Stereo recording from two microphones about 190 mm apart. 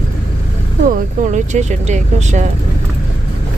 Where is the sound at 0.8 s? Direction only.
40° right (ahead or behind).